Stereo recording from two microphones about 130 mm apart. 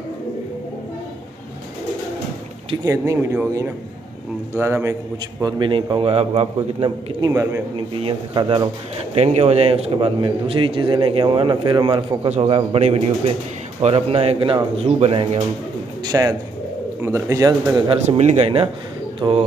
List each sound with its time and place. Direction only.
2.8 s a man's voice: 25° right (ahead or behind)
5.4 s a man's voice: 40° right (ahead or behind)
7.2 s speech: 30° right (ahead or behind)
7.7 s a man's voice: 40° right (ahead or behind)
9.1 s a man's voice: 55° right (ahead or behind)
16.1 s speech: 25° right (ahead or behind)
18.0 s a man's voice: 55° right (ahead or behind)